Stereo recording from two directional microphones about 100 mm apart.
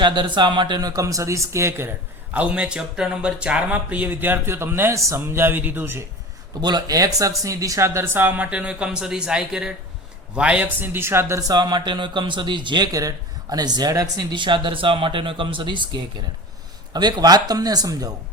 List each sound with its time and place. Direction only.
0.0 s a man's voice: 50° right (ahead or behind); by 6.0 s 20° right (ahead or behind)
6.6 s a man's voice: 45° right (ahead or behind)